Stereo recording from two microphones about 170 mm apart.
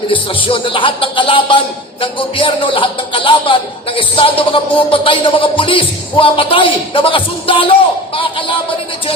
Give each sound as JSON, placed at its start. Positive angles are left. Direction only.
{"t": 0.4, "sound": "speech", "side_deg": 30}